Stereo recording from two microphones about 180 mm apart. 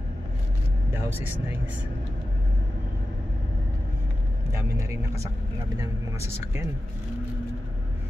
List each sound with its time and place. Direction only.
0.9 s speech: 10° right (ahead or behind)
4.5 s speech: 15° right (ahead or behind)